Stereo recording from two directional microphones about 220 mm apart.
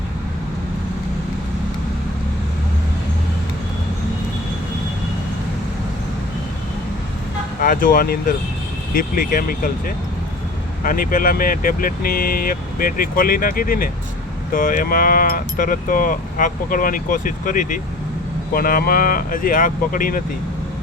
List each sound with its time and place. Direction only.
7.6 s speech: 40° left (ahead or behind)